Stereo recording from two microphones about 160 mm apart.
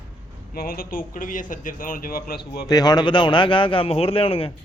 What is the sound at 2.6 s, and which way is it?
A man's voice, 25° left (ahead or behind).